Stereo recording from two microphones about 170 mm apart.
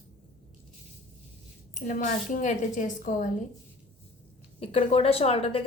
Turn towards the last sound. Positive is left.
turn(degrees=35)  # may be behind; listen again after turning